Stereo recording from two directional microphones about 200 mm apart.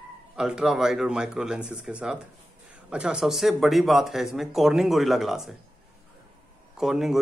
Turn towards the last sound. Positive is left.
turn(degrees=0)  # may be behind; listen again after turning